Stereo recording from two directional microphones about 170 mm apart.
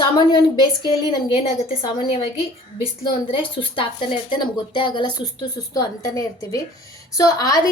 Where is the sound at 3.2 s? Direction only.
30° left (ahead or behind).